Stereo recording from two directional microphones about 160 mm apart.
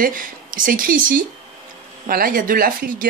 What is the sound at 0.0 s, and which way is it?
Speech, 60° right (ahead or behind).